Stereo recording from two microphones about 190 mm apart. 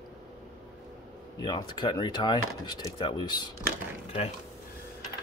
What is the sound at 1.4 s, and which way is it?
Speech, 25° left (ahead or behind).